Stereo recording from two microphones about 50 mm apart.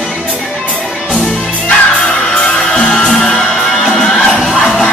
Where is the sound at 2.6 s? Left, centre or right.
Left.